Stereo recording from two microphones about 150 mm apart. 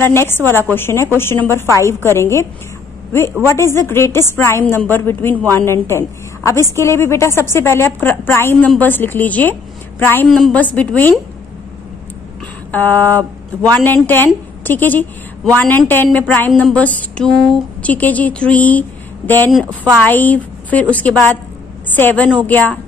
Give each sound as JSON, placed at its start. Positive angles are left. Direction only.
{"t": 0.0, "sound": "a woman's voice", "side_deg": 15}
{"t": 3.4, "sound": "a woman's voice", "side_deg": 20}
{"t": 10.2, "sound": "a woman's voice", "side_deg": 0}
{"t": 12.7, "sound": "a woman's voice", "side_deg": 10}